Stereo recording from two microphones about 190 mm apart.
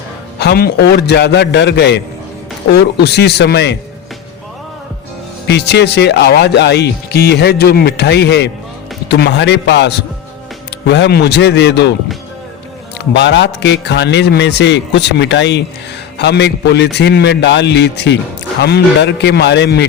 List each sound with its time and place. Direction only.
0.3 s speech: 55° left (ahead or behind)
5.5 s speech: 60° left (ahead or behind)
13.1 s speech: 65° left (ahead or behind)